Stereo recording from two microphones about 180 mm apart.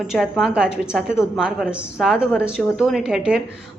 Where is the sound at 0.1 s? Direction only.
Centre (ahead or behind).